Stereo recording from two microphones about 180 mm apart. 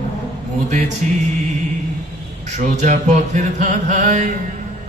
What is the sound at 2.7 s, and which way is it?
Chant, 40° right (ahead or behind).